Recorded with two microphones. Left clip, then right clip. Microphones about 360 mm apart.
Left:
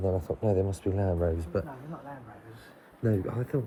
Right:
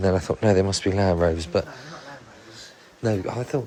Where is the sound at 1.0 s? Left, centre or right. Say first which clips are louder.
Right 9 dB; right.